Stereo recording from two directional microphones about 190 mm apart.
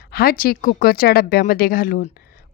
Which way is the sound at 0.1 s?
50° left (ahead or behind).